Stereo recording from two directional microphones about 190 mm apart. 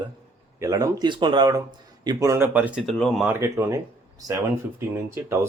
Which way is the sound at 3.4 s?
15° right (ahead or behind).